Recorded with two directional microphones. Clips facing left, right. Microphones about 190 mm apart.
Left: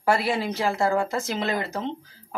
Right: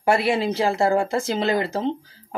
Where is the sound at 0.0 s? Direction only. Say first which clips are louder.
Right 3 dB; 25° right (ahead or behind).